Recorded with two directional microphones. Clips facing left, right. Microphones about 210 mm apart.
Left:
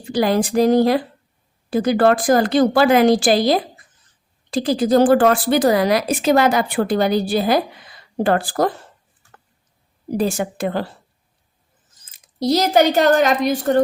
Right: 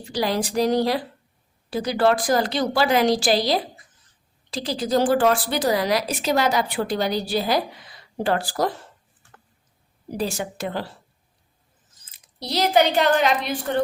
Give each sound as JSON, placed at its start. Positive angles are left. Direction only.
{"t": 0.1, "sound": "speech", "side_deg": 50}
{"t": 10.2, "sound": "speech", "side_deg": 50}
{"t": 12.1, "sound": "speech", "side_deg": 45}